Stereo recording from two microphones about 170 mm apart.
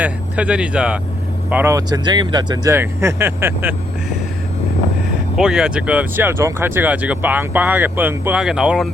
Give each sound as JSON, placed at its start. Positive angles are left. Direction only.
{"t": 0.0, "sound": "speech", "side_deg": -5}
{"t": 5.4, "sound": "speech", "side_deg": -5}